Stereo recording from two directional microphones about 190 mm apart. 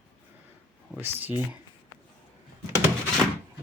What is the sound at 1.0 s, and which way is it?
Speech, 10° right (ahead or behind).